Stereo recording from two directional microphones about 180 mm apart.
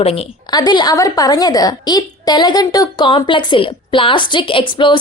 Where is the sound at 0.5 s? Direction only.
20° left (ahead or behind).